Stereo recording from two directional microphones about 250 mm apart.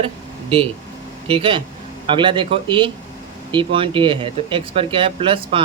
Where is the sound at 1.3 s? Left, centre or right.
Right.